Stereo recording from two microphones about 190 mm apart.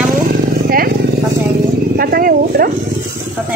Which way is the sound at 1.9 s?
50° right (ahead or behind).